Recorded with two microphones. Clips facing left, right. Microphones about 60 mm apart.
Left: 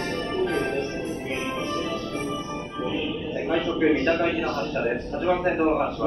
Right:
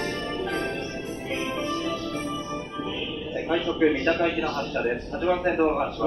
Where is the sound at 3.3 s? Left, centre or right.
Centre.